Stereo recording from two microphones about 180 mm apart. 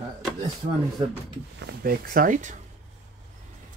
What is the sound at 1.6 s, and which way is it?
Speech, 55° right (ahead or behind).